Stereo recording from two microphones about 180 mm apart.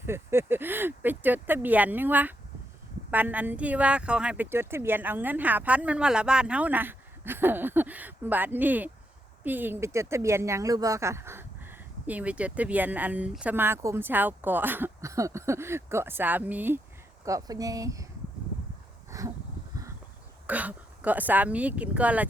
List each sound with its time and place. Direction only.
0.0 s speech: 15° right (ahead or behind)
19.1 s a sound: 20° right (ahead or behind)
20.5 s speech: 10° right (ahead or behind)